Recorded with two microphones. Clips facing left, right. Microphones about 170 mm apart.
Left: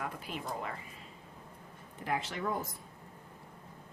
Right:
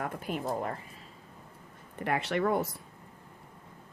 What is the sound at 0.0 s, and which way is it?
Music, 50° right (ahead or behind).